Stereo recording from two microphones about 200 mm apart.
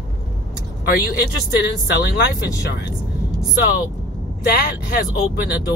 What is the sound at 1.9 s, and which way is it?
Speech, 50° left (ahead or behind).